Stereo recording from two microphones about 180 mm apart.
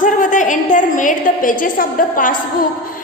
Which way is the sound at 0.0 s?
45° left (ahead or behind).